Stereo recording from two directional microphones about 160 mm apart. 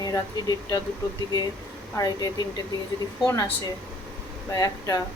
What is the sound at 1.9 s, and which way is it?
Speech, 25° left (ahead or behind).